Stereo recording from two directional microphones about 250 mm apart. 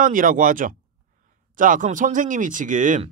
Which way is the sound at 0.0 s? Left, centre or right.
Right.